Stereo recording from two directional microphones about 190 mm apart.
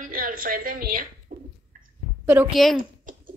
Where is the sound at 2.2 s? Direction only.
10° right (ahead or behind).